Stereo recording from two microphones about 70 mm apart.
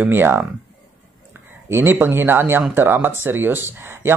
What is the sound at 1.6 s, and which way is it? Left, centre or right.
Speech, right.